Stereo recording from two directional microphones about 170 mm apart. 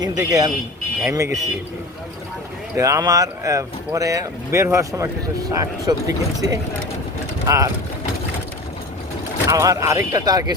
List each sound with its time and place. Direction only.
0.2 s speech: 20° right (ahead or behind)
2.7 s speech: 20° right (ahead or behind)
9.5 s speech: 15° right (ahead or behind)